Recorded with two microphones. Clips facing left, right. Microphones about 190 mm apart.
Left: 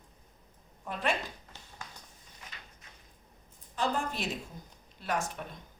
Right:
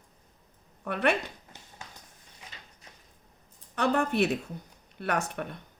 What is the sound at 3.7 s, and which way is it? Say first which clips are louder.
A woman's voice: right 7 dB; 65° right (ahead or behind).